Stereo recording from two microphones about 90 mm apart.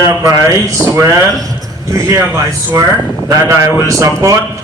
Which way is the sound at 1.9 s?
35° right (ahead or behind).